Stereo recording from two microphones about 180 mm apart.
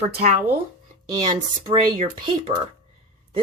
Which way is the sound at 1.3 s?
25° right (ahead or behind).